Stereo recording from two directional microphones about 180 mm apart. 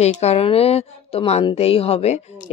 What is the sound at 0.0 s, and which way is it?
Speech, 35° left (ahead or behind).